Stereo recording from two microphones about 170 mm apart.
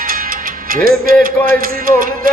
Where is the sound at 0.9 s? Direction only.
55° right (ahead or behind).